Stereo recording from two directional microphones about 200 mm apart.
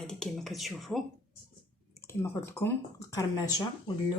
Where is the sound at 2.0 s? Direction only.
10° left (ahead or behind).